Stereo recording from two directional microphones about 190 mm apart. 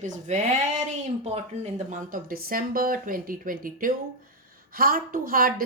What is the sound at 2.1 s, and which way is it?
Speech, 50° right (ahead or behind).